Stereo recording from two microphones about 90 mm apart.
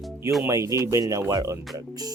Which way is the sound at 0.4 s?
35° right (ahead or behind).